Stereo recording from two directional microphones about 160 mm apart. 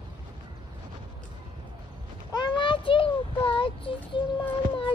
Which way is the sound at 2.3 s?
30° left (ahead or behind).